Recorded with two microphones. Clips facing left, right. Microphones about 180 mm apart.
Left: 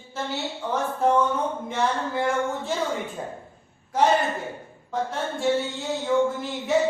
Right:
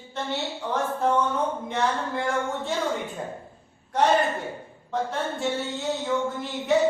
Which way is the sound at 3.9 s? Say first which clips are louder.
Even; centre (ahead or behind).